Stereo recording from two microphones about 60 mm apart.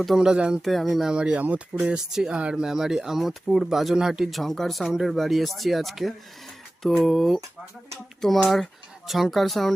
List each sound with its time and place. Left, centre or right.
0.2 s speech: centre
0.6 s speech: centre
1.1 s speech: centre
4.3 s speech: centre
4.9 s speech: centre
5.1 s speech: centre